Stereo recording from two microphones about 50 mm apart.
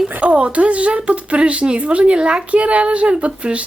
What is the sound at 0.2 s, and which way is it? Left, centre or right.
Speech, right.